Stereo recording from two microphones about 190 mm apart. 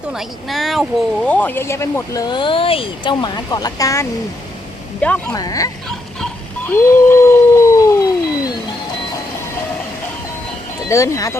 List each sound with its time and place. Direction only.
0.1 s speech: centre (ahead or behind)
5.3 s speech: 20° left (ahead or behind)
6.7 s howl: 15° left (ahead or behind)
10.8 s speech: 15° left (ahead or behind)